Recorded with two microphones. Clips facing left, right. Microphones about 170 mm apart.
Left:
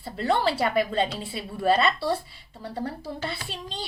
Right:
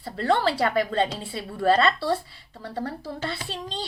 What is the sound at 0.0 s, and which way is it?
A woman's voice, 20° left (ahead or behind).